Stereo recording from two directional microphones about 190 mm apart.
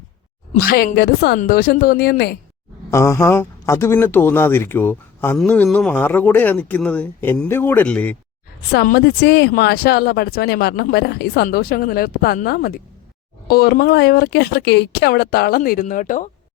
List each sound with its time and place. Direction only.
0.6 s speech: 50° left (ahead or behind)
2.9 s speech: 15° left (ahead or behind)
8.7 s speech: 55° left (ahead or behind)